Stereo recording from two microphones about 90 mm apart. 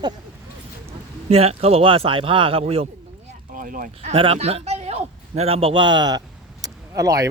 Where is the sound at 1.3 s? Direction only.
90° right.